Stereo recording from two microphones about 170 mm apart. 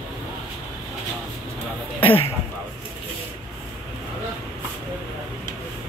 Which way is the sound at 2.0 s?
30° left (ahead or behind).